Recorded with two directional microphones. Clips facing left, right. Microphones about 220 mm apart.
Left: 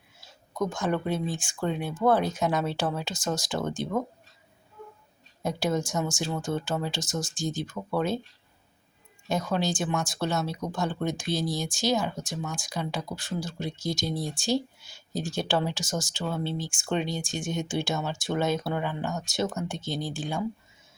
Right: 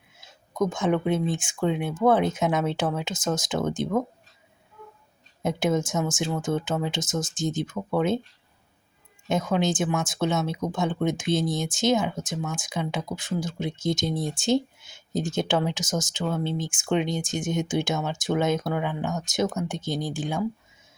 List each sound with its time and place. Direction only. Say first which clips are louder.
0.6 s speech: right 4 dB; 20° right (ahead or behind)
5.4 s speech: right 3 dB; 20° right (ahead or behind)
9.5 s speech: right 4 dB; 20° right (ahead or behind)